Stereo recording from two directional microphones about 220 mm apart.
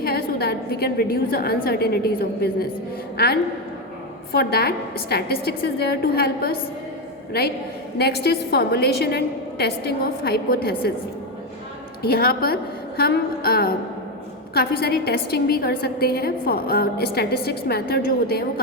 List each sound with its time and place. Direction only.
0.0 s a woman's voice: 45° left (ahead or behind)
7.9 s a woman's voice: 45° left (ahead or behind)
12.0 s a woman's voice: 45° left (ahead or behind)